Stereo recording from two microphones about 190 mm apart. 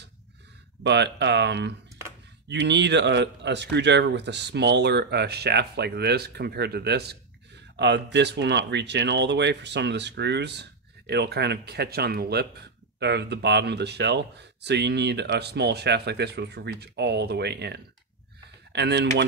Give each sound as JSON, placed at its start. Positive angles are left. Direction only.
{"t": 0.8, "sound": "speech", "side_deg": -65}